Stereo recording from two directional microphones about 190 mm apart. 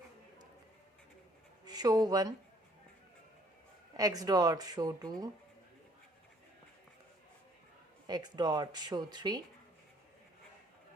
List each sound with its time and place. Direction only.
1.6 s speech: 20° right (ahead or behind)
3.9 s speech: 20° right (ahead or behind)
8.0 s speech: 20° right (ahead or behind)